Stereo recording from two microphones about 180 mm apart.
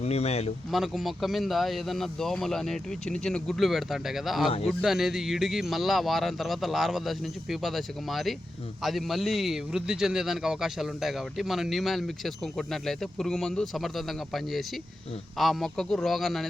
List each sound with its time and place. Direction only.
0.0 s speech: 35° left (ahead or behind)
0.7 s a man's voice: centre (ahead or behind)